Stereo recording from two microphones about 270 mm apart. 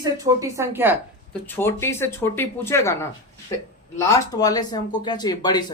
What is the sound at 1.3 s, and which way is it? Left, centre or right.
Speech, centre.